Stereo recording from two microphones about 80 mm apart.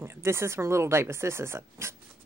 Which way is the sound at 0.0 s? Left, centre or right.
Right.